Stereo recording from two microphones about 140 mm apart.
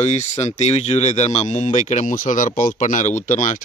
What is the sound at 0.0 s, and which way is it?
Speech, 55° left (ahead or behind).